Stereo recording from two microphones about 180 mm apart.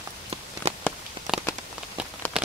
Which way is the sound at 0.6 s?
35° right (ahead or behind).